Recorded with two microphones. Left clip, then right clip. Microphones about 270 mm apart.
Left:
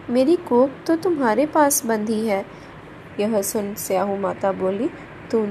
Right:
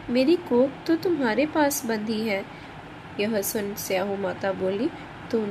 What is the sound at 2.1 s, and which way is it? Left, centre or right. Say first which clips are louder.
Speech: left 4 dB; left.